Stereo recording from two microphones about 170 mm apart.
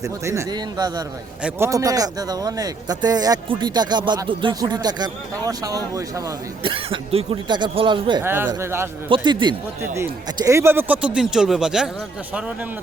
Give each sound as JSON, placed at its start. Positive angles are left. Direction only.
{"t": 0.3, "sound": "speech", "side_deg": -20}
{"t": 1.4, "sound": "speech", "side_deg": -10}
{"t": 6.6, "sound": "speech", "side_deg": -30}
{"t": 8.2, "sound": "speech", "side_deg": -15}
{"t": 9.0, "sound": "speech", "side_deg": -30}